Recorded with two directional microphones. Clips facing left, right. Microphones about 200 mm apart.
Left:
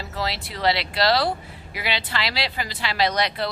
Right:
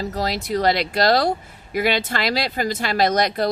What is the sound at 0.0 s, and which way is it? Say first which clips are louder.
Speech: right 5 dB; 40° right (ahead or behind).